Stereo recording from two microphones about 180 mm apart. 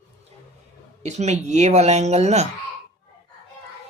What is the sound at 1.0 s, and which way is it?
Speech, 40° right (ahead or behind).